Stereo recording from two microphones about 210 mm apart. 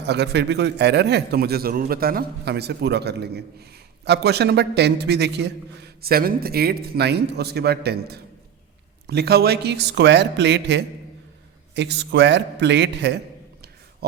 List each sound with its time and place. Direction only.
0.0 s a man's voice: 55° right (ahead or behind)